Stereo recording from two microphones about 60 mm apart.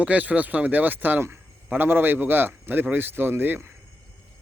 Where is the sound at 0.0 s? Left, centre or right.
Right.